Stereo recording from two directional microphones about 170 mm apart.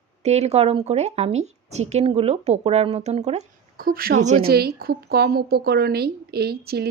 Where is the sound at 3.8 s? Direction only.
60° right (ahead or behind).